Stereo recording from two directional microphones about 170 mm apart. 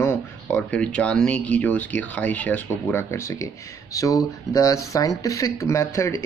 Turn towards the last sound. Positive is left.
turn(degrees=15)  # may be behind; listen again after turning